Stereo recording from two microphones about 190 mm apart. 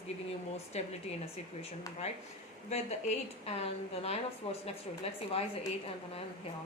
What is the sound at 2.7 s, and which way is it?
Speech, 35° left (ahead or behind).